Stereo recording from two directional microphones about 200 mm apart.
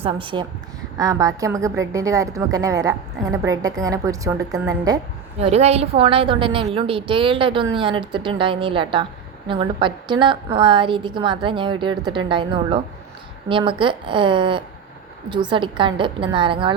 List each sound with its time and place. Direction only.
0.0 s a woman's voice: 25° right (ahead or behind)
5.4 s a woman's voice: 30° right (ahead or behind)